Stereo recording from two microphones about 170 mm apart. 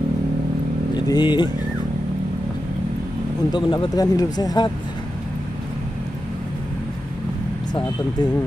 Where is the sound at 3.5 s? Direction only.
25° left (ahead or behind).